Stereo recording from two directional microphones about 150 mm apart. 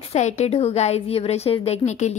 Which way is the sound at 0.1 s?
50° left (ahead or behind).